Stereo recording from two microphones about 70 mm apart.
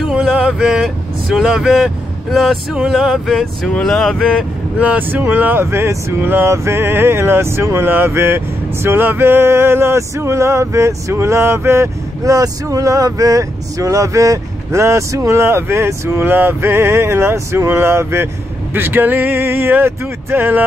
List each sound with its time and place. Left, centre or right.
0.0 s speech: centre
4.7 s speech: centre; by 6.1 s right
6.2 s speech: right
12.2 s speech: right